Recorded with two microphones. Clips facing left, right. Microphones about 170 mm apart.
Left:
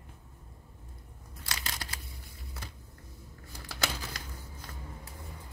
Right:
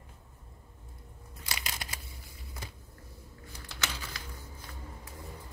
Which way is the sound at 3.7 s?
40° left (ahead or behind).